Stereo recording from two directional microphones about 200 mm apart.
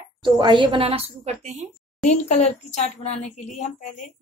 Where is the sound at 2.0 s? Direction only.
35° left (ahead or behind).